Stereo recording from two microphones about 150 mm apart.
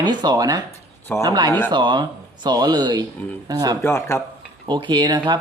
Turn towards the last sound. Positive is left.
turn(degrees=-30)  # may be behind; listen again after turning